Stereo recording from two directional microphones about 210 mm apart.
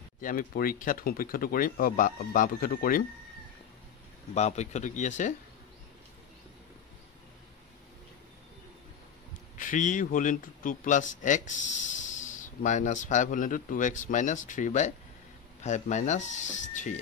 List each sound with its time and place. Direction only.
0.2 s speech: 40° left (ahead or behind)
4.3 s a man's voice: 30° left (ahead or behind)
9.6 s a man's voice: 40° left (ahead or behind)